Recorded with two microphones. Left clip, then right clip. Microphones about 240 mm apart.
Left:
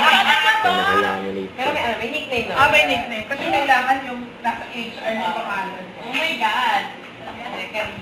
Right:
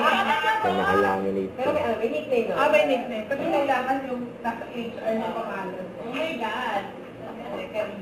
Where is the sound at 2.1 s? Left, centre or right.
Left.